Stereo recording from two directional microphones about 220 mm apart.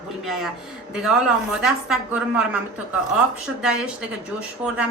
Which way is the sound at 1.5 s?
5° right (ahead or behind).